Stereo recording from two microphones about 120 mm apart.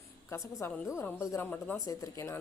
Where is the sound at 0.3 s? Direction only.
20° left (ahead or behind).